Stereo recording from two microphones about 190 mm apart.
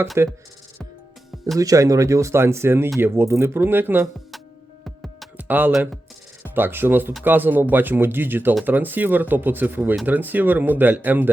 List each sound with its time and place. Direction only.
0.2 s speech: 15° right (ahead or behind)
1.5 s speech: 15° right (ahead or behind)
5.0 s music: 5° right (ahead or behind)
6.5 s speech: 10° right (ahead or behind)